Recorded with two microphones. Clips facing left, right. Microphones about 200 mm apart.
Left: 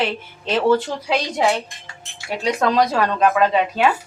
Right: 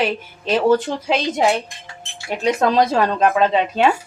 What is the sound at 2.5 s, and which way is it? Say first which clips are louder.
Speech: right 2 dB; 25° right (ahead or behind).